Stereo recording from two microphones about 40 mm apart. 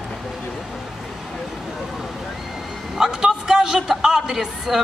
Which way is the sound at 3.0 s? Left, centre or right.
Centre.